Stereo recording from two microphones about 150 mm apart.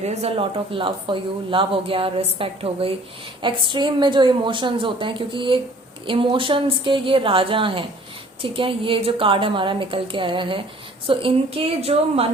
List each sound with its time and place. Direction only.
0.0 s speech: 45° right (ahead or behind)